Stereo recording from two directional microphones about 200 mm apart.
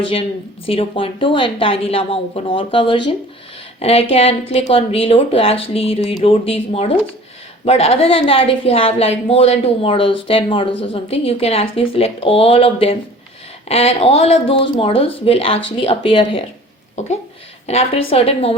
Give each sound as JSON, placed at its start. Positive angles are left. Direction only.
{"t": 0.0, "sound": "speech", "side_deg": 25}